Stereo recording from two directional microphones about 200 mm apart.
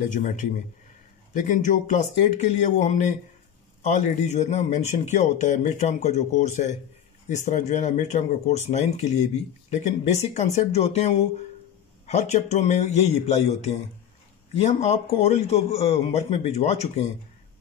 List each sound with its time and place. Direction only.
0.1 s speech: 40° left (ahead or behind)
14.5 s speech: 35° left (ahead or behind)